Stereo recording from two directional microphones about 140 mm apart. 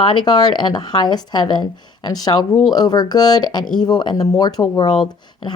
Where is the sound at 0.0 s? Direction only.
30° left (ahead or behind).